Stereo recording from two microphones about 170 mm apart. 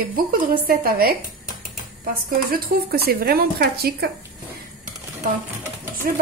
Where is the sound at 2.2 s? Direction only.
60° right (ahead or behind).